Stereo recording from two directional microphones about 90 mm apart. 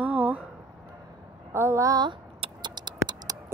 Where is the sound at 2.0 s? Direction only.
60° right (ahead or behind).